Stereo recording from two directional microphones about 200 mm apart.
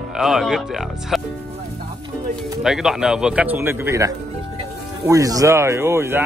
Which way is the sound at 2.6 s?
Centre (ahead or behind).